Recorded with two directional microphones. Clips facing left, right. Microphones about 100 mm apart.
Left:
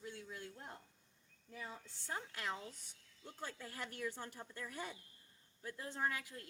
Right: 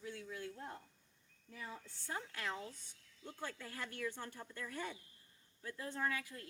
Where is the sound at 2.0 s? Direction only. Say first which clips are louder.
Even; 20° left (ahead or behind).